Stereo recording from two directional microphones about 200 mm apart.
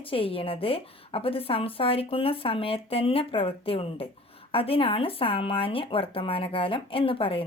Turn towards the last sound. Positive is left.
turn(degrees=25)  # may be behind; listen again after turning